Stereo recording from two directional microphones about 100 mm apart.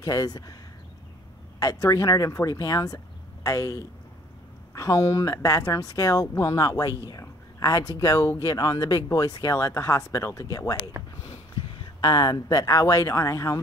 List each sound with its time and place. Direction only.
0.0 s speech: 40° left (ahead or behind)
1.6 s speech: 35° left (ahead or behind)
11.8 s speech: 45° left (ahead or behind)